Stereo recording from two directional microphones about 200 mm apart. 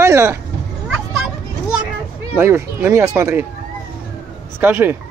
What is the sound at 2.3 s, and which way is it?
Speech, 10° right (ahead or behind).